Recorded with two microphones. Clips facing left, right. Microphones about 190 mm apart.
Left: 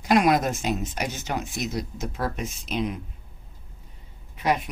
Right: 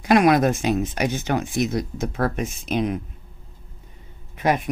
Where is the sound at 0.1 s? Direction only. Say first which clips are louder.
Right 4 dB; 60° right (ahead or behind).